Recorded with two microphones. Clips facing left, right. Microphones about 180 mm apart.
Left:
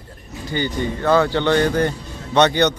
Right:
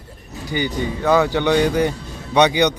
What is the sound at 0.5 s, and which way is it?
A man's voice, 15° right (ahead or behind).